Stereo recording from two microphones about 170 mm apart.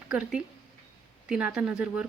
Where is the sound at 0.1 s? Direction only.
5° right (ahead or behind).